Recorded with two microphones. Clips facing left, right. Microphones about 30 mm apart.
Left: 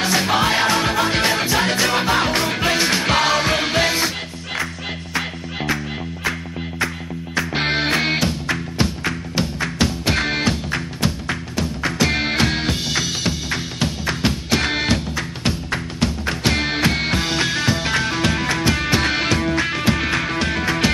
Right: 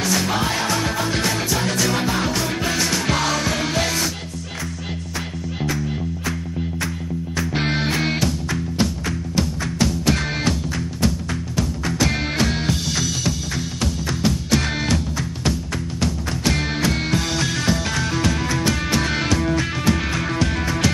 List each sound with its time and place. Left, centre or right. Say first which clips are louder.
0.0 s music: left 3 dB; left
5.1 s music: left 6 dB; left
7.3 s music: left 3 dB; left